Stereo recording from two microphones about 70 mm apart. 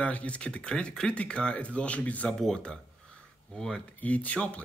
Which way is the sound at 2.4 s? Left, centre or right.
Centre.